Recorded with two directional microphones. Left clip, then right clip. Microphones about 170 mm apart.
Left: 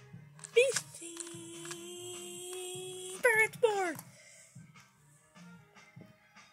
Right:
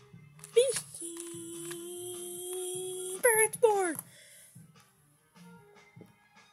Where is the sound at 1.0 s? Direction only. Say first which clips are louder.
Right 3 dB; 25° right (ahead or behind).